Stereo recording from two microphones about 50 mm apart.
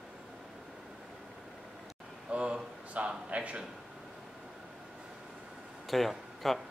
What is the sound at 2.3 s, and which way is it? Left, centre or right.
A man's voice, right.